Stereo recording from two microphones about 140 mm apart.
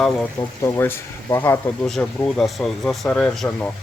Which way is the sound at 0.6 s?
15° left (ahead or behind).